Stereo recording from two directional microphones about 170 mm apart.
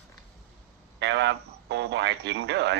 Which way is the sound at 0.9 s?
90° right.